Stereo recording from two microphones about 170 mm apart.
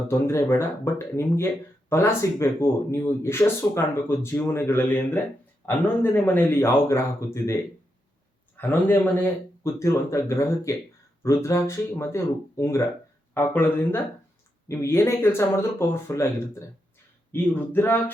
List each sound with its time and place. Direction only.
0.1 s speech: 15° left (ahead or behind)